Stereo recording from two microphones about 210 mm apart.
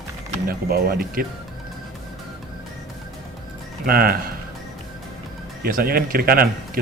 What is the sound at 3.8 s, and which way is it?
Speech, 45° right (ahead or behind).